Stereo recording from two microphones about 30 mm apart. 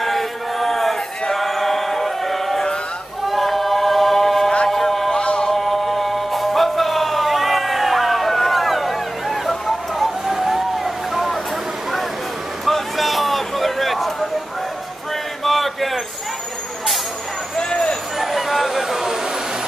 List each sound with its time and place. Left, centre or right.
0.0 s chant: centre
1.3 s choir: centre
3.3 s a capella: centre
4.6 s music: centre
5.2 s music: left
5.5 s music: centre
10.2 s vehicle: centre
12.6 s a sound: centre
15.4 s a sound: centre
17.6 s vehicle: centre
18.1 s a sound: centre